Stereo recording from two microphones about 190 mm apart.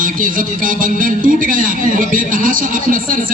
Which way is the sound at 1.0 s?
45° right (ahead or behind).